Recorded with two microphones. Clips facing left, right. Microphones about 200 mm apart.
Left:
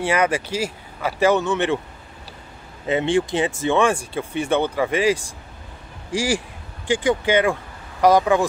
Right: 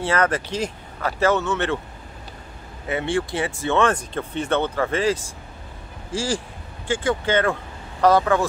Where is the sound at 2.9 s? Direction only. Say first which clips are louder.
Left 4 dB; 20° left (ahead or behind).